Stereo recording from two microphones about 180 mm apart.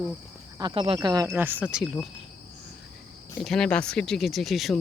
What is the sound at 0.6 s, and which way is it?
Speech, 30° right (ahead or behind).